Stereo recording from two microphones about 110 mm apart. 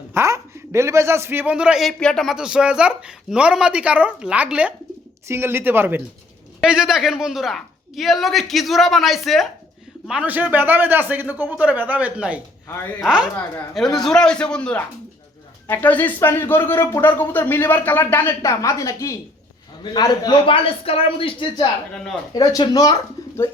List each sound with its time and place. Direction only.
0.1 s a man's voice: 25° right (ahead or behind)
6.6 s a woman's voice: 5° right (ahead or behind)
10.1 s a man's voice: 10° right (ahead or behind)
14.0 s a man's voice: 5° left (ahead or behind); by 19.1 s 30° left (ahead or behind)
19.8 s speech: 40° left (ahead or behind)
20.4 s speech: 55° left (ahead or behind); by 23.0 s 35° left (ahead or behind)